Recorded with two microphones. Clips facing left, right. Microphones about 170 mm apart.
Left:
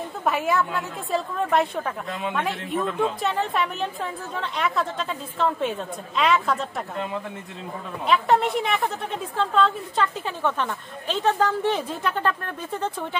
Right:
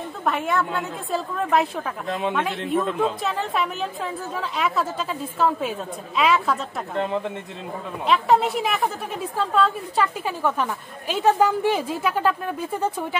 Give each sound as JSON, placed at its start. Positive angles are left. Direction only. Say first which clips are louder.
{"t": 0.2, "sound": "speech", "louder": "even", "side_deg": 5}
{"t": 8.1, "sound": "a woman's voice", "louder": "right 1 dB", "side_deg": 0}